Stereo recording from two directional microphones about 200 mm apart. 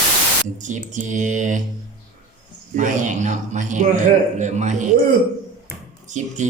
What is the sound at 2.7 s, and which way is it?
Speech, 35° right (ahead or behind).